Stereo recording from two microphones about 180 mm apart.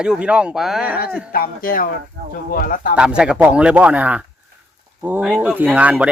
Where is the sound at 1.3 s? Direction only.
55° left (ahead or behind).